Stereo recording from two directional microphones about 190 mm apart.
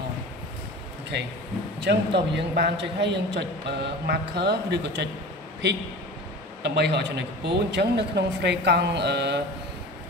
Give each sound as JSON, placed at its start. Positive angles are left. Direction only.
{"t": 1.8, "sound": "a man's voice", "side_deg": -65}
{"t": 6.6, "sound": "a man's voice", "side_deg": -65}